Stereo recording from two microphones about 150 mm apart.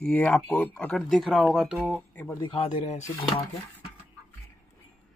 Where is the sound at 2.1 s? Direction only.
20° left (ahead or behind).